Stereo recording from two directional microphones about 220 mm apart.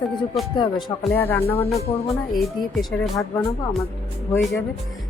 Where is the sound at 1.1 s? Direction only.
10° left (ahead or behind).